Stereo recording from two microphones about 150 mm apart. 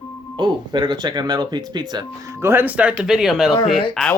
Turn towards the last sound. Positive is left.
turn(degrees=5)  # may be behind; listen again after turning